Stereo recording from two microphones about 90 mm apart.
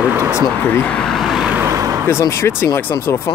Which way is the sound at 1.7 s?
35° right (ahead or behind).